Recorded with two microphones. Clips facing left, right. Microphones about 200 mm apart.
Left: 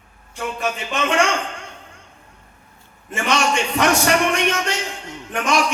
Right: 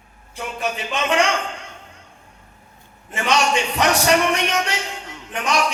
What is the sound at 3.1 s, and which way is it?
Speech, 50° left (ahead or behind).